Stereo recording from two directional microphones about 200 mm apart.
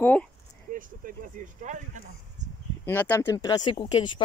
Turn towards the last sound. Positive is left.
turn(degrees=25)  # may be behind; listen again after turning